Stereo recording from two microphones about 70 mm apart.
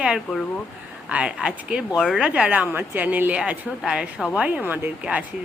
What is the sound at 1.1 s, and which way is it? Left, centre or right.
Speech, centre.